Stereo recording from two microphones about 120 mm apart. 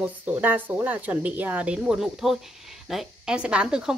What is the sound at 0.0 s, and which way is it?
Speech, 15° right (ahead or behind).